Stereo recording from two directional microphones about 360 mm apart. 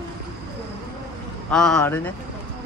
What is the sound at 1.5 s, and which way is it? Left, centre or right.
Speech, centre.